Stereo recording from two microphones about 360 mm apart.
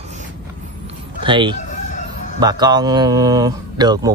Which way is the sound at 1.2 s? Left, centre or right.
Centre.